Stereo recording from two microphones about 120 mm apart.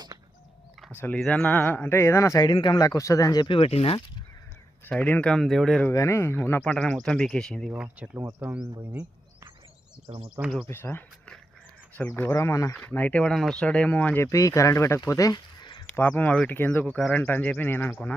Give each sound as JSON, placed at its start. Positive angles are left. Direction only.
{"t": 0.9, "sound": "speech", "side_deg": 15}
{"t": 2.4, "sound": "speech", "side_deg": 40}
{"t": 4.9, "sound": "speech", "side_deg": 10}
{"t": 5.9, "sound": "speech", "side_deg": 25}
{"t": 7.7, "sound": "speech", "side_deg": -10}
{"t": 10.1, "sound": "speech", "side_deg": -45}
{"t": 10.7, "sound": "speech", "side_deg": 15}
{"t": 12.3, "sound": "speech", "side_deg": 25}
{"t": 12.7, "sound": "speech", "side_deg": 15}
{"t": 14.3, "sound": "speech", "side_deg": 25}
{"t": 15.9, "sound": "speech", "side_deg": 15}